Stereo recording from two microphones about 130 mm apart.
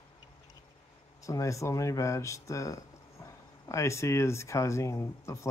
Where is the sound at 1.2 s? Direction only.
25° left (ahead or behind).